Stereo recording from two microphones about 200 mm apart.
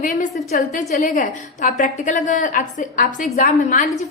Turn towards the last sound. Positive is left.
turn(degrees=40)  # may be behind; listen again after turning